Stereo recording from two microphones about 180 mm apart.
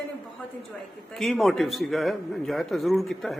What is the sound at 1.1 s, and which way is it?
A man's voice, centre (ahead or behind).